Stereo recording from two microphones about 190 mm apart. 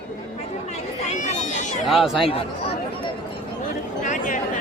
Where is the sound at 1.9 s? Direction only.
Centre (ahead or behind).